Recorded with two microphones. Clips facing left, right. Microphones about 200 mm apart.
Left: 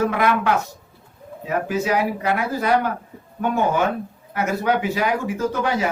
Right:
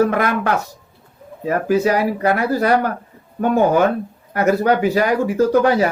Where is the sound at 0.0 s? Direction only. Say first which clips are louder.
Right 3 dB; 45° right (ahead or behind).